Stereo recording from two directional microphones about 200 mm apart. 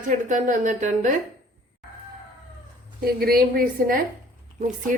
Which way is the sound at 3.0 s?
50° right (ahead or behind).